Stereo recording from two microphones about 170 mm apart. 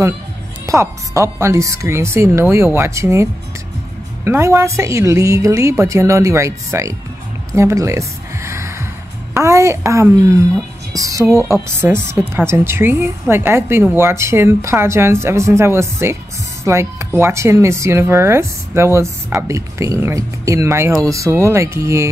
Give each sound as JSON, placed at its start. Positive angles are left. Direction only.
{"t": 0.7, "sound": "a woman's voice", "side_deg": -15}